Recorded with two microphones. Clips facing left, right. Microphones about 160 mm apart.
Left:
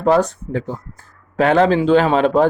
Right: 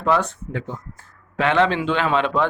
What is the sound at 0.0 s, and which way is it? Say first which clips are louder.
Speech: left 6 dB; 40° left (ahead or behind).